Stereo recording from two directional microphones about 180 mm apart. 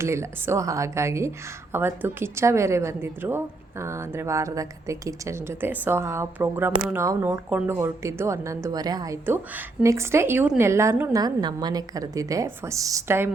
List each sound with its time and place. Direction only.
0.0 s a woman's voice: 15° right (ahead or behind)